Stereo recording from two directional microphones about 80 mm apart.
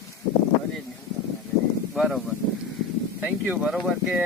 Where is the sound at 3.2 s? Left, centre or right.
Centre.